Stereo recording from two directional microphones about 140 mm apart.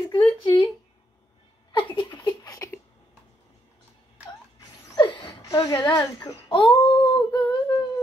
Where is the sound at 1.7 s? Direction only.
35° left (ahead or behind).